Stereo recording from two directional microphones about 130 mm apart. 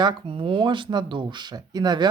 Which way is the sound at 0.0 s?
40° right (ahead or behind).